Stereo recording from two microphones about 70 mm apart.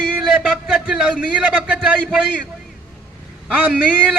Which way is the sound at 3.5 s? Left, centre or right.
Centre.